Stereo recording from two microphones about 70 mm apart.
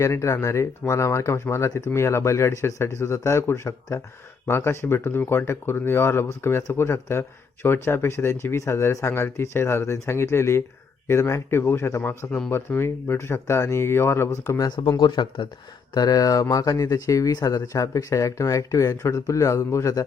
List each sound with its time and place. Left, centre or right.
0.0 s speech: left
4.4 s speech: left
14.6 s speech: left
16.0 s speech: left